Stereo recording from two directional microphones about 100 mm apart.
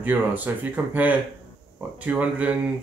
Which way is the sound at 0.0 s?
20° right (ahead or behind).